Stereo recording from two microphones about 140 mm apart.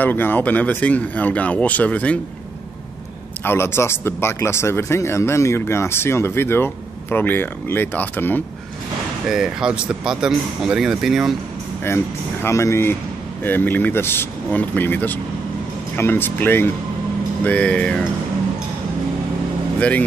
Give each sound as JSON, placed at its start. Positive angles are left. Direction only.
{"t": 0.0, "sound": "speech", "side_deg": 15}
{"t": 3.4, "sound": "speech", "side_deg": 20}
{"t": 9.3, "sound": "speech", "side_deg": -5}
{"t": 11.8, "sound": "speech", "side_deg": 20}
{"t": 19.8, "sound": "speech", "side_deg": 10}